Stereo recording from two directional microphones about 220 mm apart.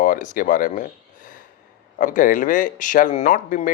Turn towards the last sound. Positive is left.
turn(degrees=40)  # may be behind; listen again after turning